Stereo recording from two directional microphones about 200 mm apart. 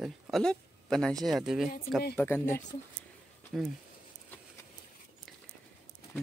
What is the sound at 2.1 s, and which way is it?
Speech, 10° left (ahead or behind).